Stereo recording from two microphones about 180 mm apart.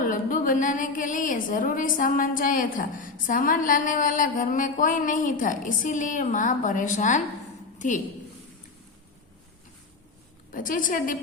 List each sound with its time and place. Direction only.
0.0 s a woman's voice: 50° left (ahead or behind)
10.5 s a woman's voice: 50° left (ahead or behind)